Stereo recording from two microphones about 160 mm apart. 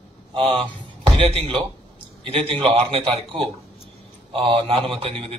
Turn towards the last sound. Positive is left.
turn(degrees=-35)  # may be behind; listen again after turning